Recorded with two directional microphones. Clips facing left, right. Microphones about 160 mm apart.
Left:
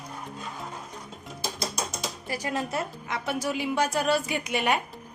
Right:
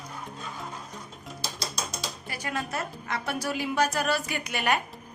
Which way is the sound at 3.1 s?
20° left (ahead or behind).